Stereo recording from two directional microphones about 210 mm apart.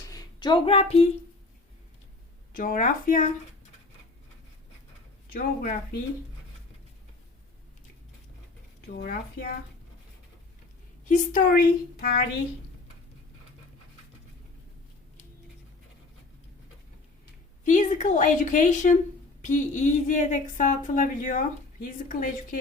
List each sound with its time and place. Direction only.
0.1 s speech: 20° left (ahead or behind)
2.5 s a woman's voice: 40° left (ahead or behind)
5.3 s speech: 45° left (ahead or behind)
9.0 s speech: 45° left (ahead or behind)
11.1 s a woman's voice: 40° left (ahead or behind)
17.7 s a woman's voice: 35° left (ahead or behind)